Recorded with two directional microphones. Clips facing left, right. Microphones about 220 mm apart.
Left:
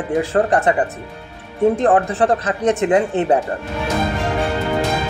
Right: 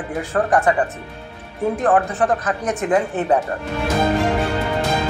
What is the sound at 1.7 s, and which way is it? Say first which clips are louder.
Speech: left 2 dB; 25° left (ahead or behind).